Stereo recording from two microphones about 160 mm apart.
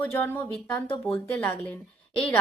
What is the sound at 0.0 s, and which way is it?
Speech, 10° left (ahead or behind).